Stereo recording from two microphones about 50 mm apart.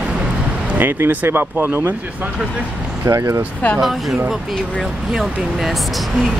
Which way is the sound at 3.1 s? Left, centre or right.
Right.